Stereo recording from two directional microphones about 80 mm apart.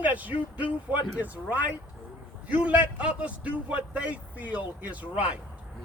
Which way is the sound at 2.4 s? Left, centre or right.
Centre.